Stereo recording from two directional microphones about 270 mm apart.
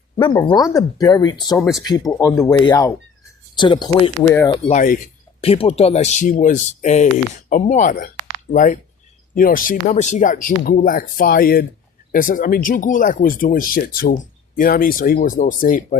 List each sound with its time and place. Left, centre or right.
0.2 s speech: centre
4.7 s speech: left